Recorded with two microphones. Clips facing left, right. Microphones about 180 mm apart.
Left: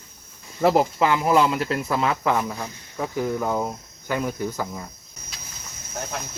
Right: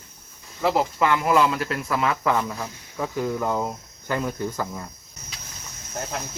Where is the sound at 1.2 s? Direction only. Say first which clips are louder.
Left 1 dB; 25° left (ahead or behind).